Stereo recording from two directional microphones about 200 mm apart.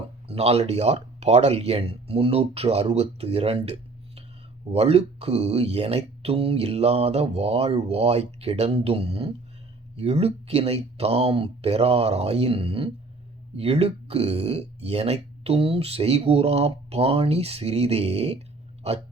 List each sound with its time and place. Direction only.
0.3 s speech: 30° right (ahead or behind)